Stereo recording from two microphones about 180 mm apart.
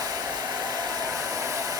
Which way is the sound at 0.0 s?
20° right (ahead or behind).